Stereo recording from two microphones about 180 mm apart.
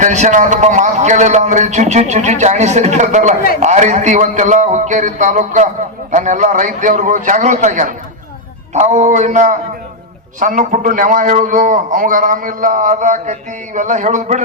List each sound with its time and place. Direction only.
0.0 s a man's voice: 40° right (ahead or behind)